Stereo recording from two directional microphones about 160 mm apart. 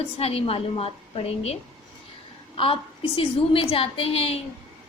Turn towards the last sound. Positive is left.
turn(degrees=35)  # may be behind; listen again after turning